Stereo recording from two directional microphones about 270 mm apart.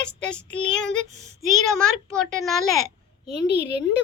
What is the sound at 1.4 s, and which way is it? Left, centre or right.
Speech, centre.